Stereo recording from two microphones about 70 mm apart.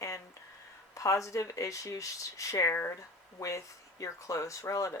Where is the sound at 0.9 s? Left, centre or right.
Left.